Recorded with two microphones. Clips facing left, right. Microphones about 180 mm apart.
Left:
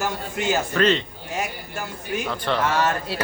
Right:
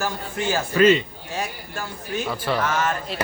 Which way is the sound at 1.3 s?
15° left (ahead or behind).